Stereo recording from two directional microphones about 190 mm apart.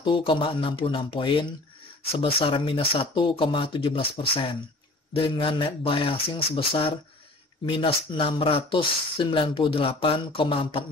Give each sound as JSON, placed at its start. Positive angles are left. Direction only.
{"t": 0.0, "sound": "speech", "side_deg": 25}